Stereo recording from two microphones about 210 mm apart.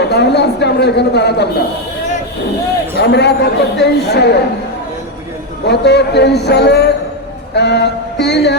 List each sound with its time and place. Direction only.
0.0 s a man's voice: 55° left (ahead or behind)
3.0 s a man's voice: 55° left (ahead or behind)
5.6 s a man's voice: 55° left (ahead or behind)